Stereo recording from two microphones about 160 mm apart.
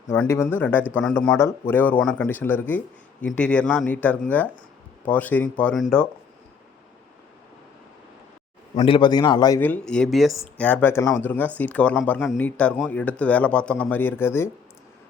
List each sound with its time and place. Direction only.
0.1 s speech: 15° left (ahead or behind)
8.8 s a man's voice: 30° left (ahead or behind)
9.6 s speech: 10° left (ahead or behind)
10.7 s speech: 15° left (ahead or behind)